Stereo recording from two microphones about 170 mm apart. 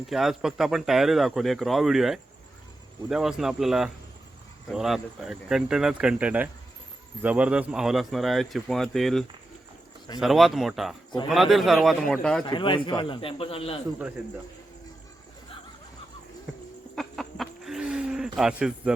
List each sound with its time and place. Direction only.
0.1 s speech: centre (ahead or behind)
12.5 s a man's voice: 30° left (ahead or behind)
16.9 s a sound: centre (ahead or behind)